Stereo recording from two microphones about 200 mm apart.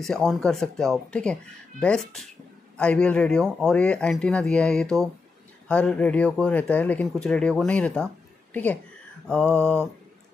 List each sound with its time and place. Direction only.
0.0 s speech: centre (ahead or behind)
9.6 s speech: 5° left (ahead or behind)